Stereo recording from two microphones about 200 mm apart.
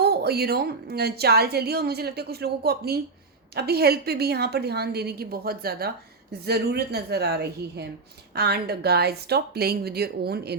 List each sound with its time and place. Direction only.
0.0 s a woman's voice: 50° right (ahead or behind)